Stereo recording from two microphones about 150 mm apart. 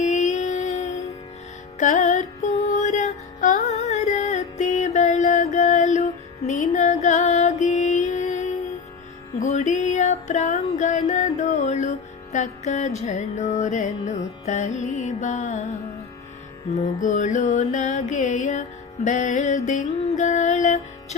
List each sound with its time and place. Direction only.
0.0 s music: 50° left (ahead or behind)
16.6 s music: 55° left (ahead or behind)